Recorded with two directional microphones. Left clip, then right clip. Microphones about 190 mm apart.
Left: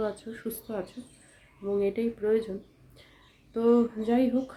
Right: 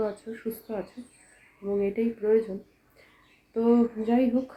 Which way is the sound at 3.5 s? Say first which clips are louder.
Even; 5° left (ahead or behind).